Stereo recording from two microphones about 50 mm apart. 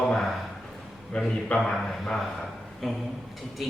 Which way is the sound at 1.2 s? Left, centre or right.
Centre.